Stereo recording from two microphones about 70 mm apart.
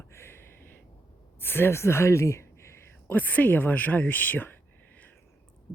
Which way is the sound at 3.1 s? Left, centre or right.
Left.